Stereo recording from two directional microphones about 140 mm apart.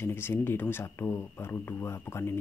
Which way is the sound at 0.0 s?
15° left (ahead or behind).